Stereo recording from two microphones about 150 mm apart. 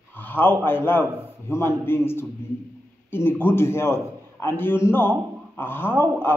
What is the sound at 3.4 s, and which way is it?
A man's voice, 15° left (ahead or behind).